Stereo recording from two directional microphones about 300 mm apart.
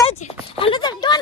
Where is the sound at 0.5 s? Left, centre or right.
Centre.